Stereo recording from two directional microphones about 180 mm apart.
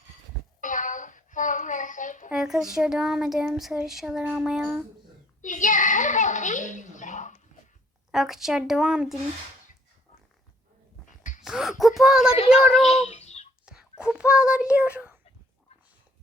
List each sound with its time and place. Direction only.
0.6 s a sound: 45° left (ahead or behind)
2.3 s speech: centre (ahead or behind)
5.4 s a child's voice: 45° left (ahead or behind)
8.1 s speech: centre (ahead or behind)
11.0 s a sound: 45° left (ahead or behind)
11.4 s speech: centre (ahead or behind)
12.3 s a child's voice: 35° left (ahead or behind)
12.8 s a sound: 35° left (ahead or behind)
13.7 s speech: 5° right (ahead or behind)